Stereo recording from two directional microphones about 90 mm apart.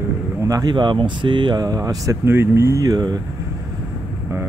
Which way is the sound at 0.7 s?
60° right (ahead or behind).